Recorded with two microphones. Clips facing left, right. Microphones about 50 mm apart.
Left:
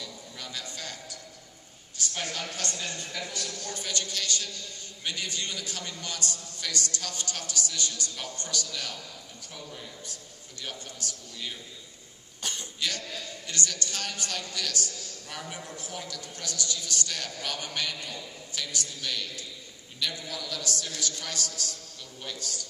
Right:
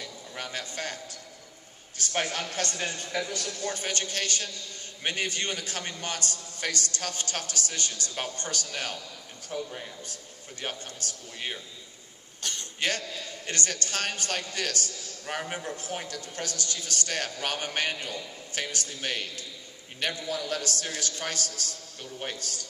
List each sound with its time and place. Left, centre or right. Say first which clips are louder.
0.0 s a sound: right 3 dB; right
2.0 s a man's voice: right 4 dB; right
12.4 s cough: even; centre
12.8 s a man's voice: right 4 dB; right